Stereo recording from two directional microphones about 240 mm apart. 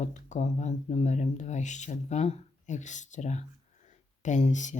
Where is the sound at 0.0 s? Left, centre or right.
Left.